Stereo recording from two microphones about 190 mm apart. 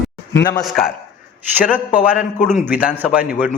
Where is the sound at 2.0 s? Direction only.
5° right (ahead or behind).